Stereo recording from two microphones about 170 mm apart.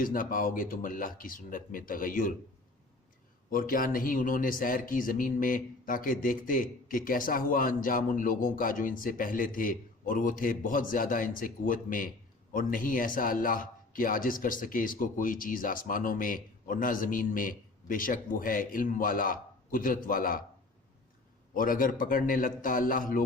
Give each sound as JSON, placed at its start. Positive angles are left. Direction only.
{"t": 0.0, "sound": "speech", "side_deg": 55}
{"t": 3.5, "sound": "speech", "side_deg": 55}
{"t": 21.5, "sound": "speech", "side_deg": 55}